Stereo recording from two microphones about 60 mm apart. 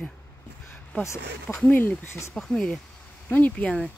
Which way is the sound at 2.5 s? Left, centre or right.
Centre.